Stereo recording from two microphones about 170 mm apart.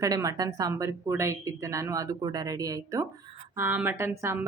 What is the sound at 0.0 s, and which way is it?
A woman's voice, 20° right (ahead or behind).